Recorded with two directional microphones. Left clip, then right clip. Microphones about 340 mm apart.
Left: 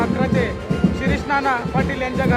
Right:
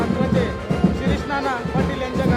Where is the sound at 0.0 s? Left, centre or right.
Centre.